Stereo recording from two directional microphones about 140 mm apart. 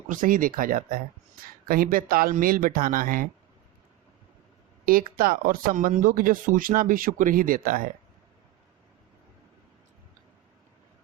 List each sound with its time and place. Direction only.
0.1 s speech: 75° right (ahead or behind)
4.9 s speech: 90° right